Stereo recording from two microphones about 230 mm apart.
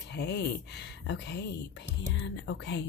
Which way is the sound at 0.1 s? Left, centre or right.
Left.